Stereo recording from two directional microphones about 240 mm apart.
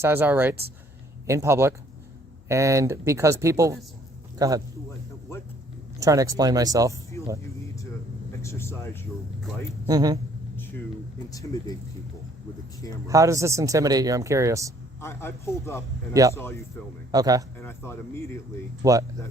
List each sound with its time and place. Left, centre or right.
0.0 s speech: centre
6.0 s speech: centre
7.1 s speech: centre
8.4 s speech: centre
9.8 s speech: centre
11.3 s speech: centre
13.1 s speech: centre
15.0 s speech: centre
17.1 s speech: centre
17.6 s speech: centre
18.8 s speech: centre